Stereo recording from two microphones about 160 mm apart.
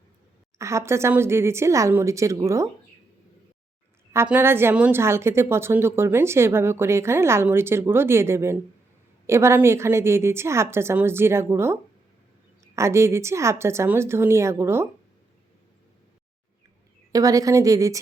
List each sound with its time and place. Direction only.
0.6 s a woman's voice: 15° right (ahead or behind)
4.1 s a woman's voice: 15° right (ahead or behind)
17.1 s a woman's voice: 20° right (ahead or behind)